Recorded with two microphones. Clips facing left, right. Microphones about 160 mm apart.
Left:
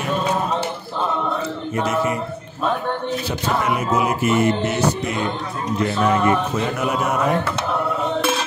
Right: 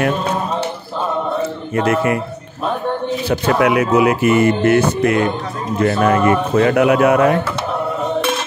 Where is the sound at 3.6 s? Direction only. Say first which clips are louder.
Right 8 dB; 75° right (ahead or behind).